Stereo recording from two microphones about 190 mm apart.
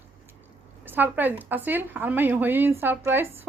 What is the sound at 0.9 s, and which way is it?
A woman's voice, 10° right (ahead or behind).